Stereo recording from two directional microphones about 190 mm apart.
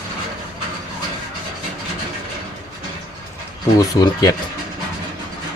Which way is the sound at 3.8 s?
20° left (ahead or behind).